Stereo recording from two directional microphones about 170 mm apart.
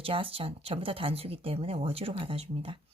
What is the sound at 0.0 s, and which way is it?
Speech, 35° right (ahead or behind).